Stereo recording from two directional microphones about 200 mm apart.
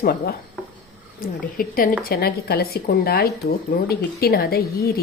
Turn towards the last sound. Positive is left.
turn(degrees=50)  # may be behind; listen again after turning